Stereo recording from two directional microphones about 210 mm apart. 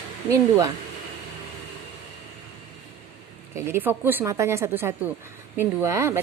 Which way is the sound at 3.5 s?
10° right (ahead or behind).